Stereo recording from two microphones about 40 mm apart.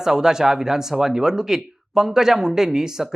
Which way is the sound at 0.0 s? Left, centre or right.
Centre.